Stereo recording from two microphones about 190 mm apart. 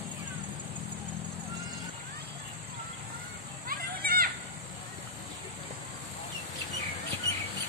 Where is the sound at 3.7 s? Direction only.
50° right (ahead or behind).